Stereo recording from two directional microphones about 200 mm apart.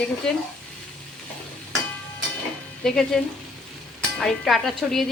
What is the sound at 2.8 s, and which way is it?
Frying, 5° left (ahead or behind).